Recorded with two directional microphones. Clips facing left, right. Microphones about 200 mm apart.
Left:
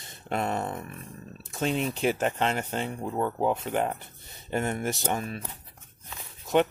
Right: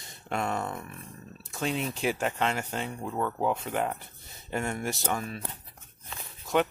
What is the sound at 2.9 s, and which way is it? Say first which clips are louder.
Speech: left 2 dB; 20° left (ahead or behind).